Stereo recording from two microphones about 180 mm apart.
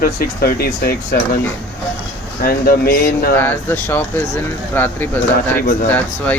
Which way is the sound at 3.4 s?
10° left (ahead or behind).